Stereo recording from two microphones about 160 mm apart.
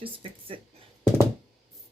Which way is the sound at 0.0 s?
35° right (ahead or behind).